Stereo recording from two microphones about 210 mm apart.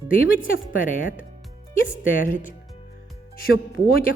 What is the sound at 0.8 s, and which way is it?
Speech, 40° left (ahead or behind).